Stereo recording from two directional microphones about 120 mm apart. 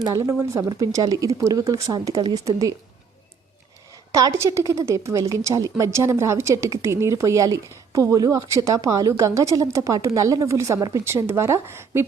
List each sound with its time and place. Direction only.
0.0 s a woman's voice: 25° right (ahead or behind)
4.1 s a woman's voice: 25° right (ahead or behind)